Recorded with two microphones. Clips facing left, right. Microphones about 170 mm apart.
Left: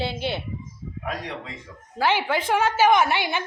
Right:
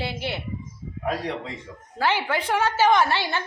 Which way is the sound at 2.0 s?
15° left (ahead or behind).